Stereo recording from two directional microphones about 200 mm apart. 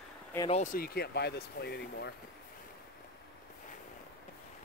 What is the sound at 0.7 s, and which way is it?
Speech, 50° left (ahead or behind).